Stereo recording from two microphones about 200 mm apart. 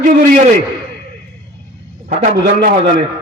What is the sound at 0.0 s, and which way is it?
Speech, 35° right (ahead or behind).